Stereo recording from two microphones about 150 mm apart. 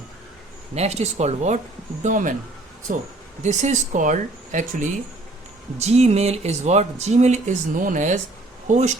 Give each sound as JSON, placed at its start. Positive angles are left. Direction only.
{"t": 0.8, "sound": "speech", "side_deg": -45}
{"t": 2.0, "sound": "speech", "side_deg": -60}
{"t": 3.4, "sound": "speech", "side_deg": -50}
{"t": 5.8, "sound": "speech", "side_deg": -45}